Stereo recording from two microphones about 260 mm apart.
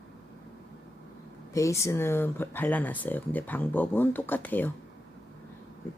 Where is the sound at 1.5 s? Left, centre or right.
Centre.